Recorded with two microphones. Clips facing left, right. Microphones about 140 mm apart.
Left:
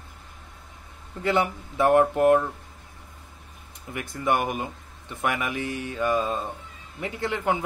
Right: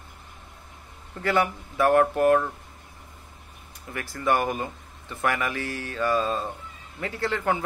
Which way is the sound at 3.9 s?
20° left (ahead or behind).